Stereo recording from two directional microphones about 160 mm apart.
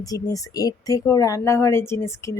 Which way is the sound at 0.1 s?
20° left (ahead or behind).